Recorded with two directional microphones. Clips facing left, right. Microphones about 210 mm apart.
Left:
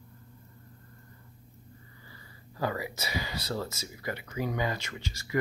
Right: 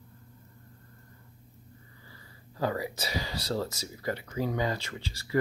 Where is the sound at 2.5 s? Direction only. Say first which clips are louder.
Right 2 dB; 35° right (ahead or behind).